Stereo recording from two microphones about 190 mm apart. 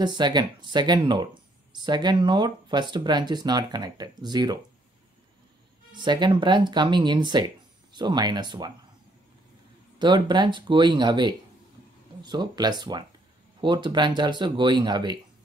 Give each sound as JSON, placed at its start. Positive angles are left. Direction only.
{"t": 0.0, "sound": "speech", "side_deg": -20}
{"t": 5.9, "sound": "speech", "side_deg": -25}
{"t": 9.9, "sound": "speech", "side_deg": -25}